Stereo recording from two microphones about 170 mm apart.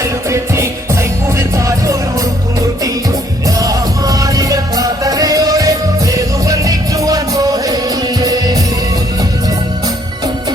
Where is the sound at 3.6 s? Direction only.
20° right (ahead or behind).